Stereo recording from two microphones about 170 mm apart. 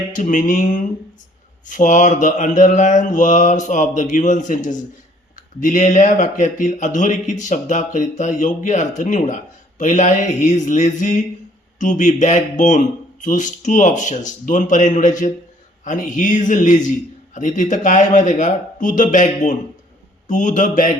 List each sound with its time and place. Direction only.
0.1 s a man's voice: 50° left (ahead or behind)